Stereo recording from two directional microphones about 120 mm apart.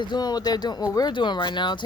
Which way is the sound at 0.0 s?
35° left (ahead or behind).